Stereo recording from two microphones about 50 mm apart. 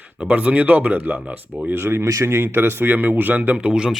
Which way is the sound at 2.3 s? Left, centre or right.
Right.